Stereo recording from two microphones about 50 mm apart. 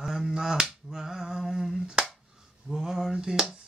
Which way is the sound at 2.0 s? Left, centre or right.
Centre.